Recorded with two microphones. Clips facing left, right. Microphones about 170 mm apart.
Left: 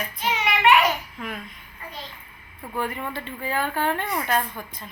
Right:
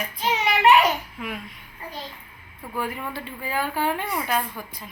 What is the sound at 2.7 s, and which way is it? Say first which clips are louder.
Speech: left 1 dB; 5° right (ahead or behind).